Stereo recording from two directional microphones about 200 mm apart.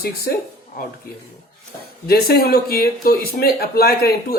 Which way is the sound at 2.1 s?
50° left (ahead or behind).